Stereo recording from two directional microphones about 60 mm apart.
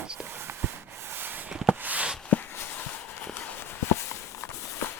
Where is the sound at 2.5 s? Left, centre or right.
Left.